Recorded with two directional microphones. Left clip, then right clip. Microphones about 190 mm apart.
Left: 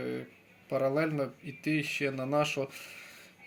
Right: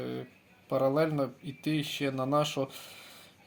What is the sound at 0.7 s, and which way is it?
Speech, 40° right (ahead or behind).